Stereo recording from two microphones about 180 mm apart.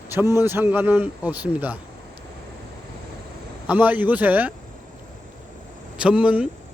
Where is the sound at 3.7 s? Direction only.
10° right (ahead or behind).